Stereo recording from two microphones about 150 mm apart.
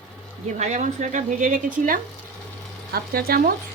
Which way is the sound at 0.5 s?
55° right (ahead or behind).